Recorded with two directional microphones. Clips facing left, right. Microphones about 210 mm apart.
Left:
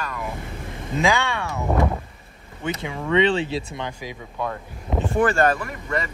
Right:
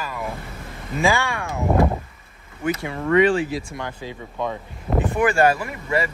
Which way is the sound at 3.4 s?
25° left (ahead or behind).